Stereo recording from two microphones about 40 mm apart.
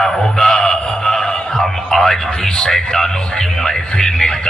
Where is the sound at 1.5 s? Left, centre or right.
Centre.